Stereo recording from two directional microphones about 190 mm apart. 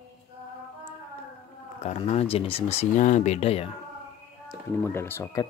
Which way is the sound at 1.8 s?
35° left (ahead or behind).